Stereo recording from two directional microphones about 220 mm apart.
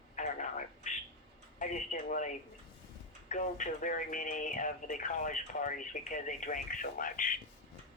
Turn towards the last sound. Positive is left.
turn(degrees=40)  # may be behind; listen again after turning